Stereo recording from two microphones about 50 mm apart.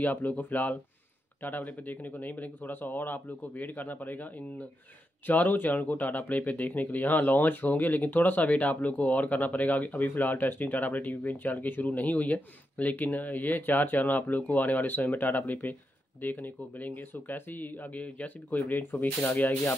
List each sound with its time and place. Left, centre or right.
0.0 s speech: left